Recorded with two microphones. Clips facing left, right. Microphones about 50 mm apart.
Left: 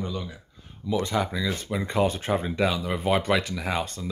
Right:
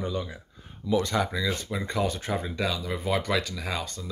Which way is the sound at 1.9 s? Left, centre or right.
Left.